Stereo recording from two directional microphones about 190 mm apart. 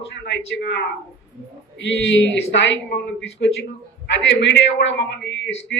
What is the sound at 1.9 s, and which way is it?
A man's voice, 75° left (ahead or behind).